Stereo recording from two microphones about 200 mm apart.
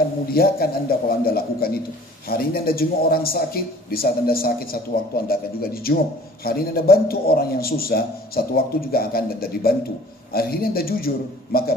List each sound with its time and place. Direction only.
0.3 s a man's voice: 50° left (ahead or behind)